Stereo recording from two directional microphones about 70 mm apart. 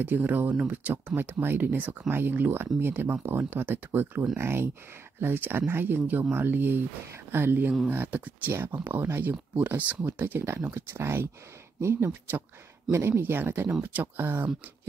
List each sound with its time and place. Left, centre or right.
0.0 s speech: right
12.1 s speech: right
13.7 s speech: right